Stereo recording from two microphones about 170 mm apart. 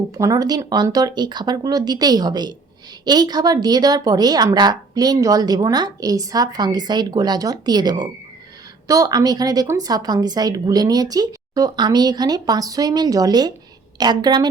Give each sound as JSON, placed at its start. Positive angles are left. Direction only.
{"t": 0.1, "sound": "a woman's voice", "side_deg": -20}